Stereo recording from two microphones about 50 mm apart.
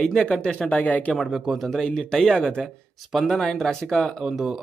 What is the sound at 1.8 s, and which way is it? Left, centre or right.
Speech, centre.